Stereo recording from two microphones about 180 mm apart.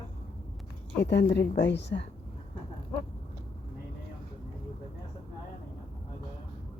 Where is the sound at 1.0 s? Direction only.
65° left (ahead or behind).